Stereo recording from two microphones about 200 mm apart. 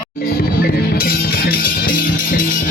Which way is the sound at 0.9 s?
50° left (ahead or behind).